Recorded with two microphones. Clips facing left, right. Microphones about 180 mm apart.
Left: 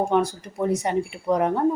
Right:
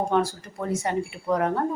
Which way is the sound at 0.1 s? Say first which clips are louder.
Left 2 dB; 20° left (ahead or behind).